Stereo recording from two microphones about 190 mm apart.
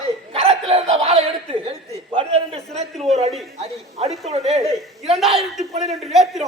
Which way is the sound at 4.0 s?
35° right (ahead or behind).